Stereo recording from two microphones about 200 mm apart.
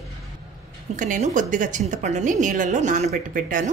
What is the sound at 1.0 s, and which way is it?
A woman's voice, 40° right (ahead or behind).